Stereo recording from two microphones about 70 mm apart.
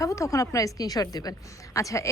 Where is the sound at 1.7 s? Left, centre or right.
Left.